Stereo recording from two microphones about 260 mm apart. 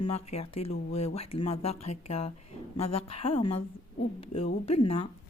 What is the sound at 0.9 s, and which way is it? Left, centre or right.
A woman's voice, left.